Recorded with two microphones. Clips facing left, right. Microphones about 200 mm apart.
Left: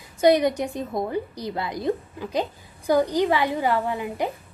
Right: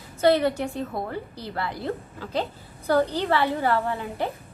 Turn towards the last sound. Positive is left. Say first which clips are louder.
# left 2 dB
turn(degrees=15)  # may be behind; listen again after turning